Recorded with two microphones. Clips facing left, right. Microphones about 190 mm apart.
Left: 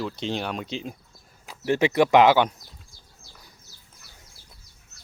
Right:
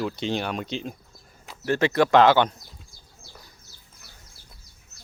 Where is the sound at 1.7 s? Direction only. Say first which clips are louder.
Left 1 dB; 15° left (ahead or behind).